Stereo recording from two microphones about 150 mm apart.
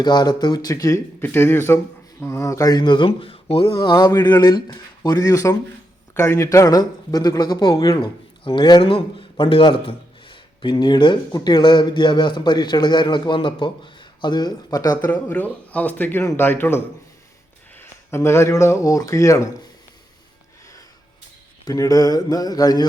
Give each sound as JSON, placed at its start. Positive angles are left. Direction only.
{"t": 0.0, "sound": "speech", "side_deg": 30}
{"t": 3.8, "sound": "speech", "side_deg": 25}
{"t": 15.0, "sound": "speech", "side_deg": 10}
{"t": 21.6, "sound": "speech", "side_deg": 25}